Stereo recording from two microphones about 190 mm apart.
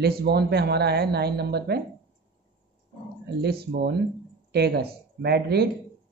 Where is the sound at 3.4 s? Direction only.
60° right (ahead or behind).